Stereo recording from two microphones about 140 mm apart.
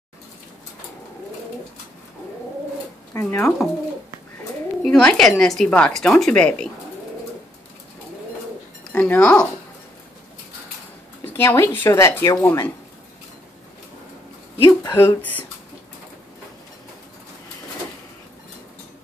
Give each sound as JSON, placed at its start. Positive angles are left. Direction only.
{"t": 3.1, "sound": "a sound", "side_deg": 15}
{"t": 4.8, "sound": "a woman's voice", "side_deg": 5}
{"t": 8.9, "sound": "speech", "side_deg": 10}
{"t": 11.2, "sound": "speech", "side_deg": 15}
{"t": 14.6, "sound": "speech", "side_deg": 30}
{"t": 15.0, "sound": "speech", "side_deg": 15}